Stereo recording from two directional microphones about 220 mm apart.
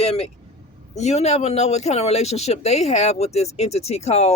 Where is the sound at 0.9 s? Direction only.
30° left (ahead or behind).